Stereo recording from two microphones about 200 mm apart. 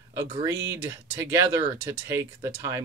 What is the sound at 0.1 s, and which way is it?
Speech, 15° right (ahead or behind).